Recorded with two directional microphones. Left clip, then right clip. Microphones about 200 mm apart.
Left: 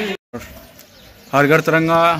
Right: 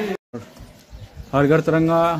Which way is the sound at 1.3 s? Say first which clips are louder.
Left 4 dB; 5° left (ahead or behind).